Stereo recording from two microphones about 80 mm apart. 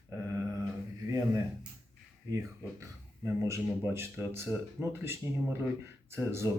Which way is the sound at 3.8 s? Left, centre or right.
Right.